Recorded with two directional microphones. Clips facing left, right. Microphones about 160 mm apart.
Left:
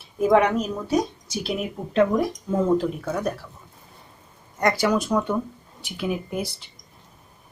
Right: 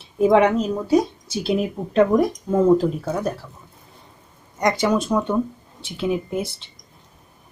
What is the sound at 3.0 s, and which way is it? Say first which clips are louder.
Speech: right 2 dB; 25° right (ahead or behind).